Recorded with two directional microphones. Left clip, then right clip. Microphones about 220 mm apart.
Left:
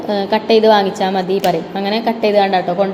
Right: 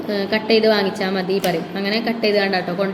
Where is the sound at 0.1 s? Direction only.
10° left (ahead or behind).